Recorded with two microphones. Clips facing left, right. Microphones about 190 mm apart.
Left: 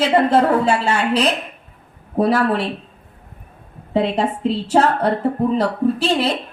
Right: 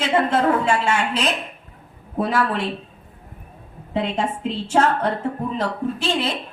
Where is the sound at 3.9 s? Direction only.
35° left (ahead or behind).